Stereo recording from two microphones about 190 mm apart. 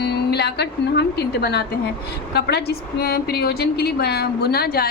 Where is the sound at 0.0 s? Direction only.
60° left (ahead or behind).